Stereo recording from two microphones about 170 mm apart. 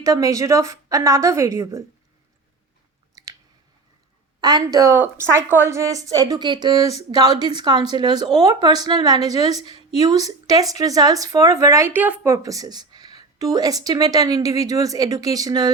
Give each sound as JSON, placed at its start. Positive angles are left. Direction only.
{"t": 0.0, "sound": "a woman's voice", "side_deg": -20}
{"t": 4.4, "sound": "a woman's voice", "side_deg": -25}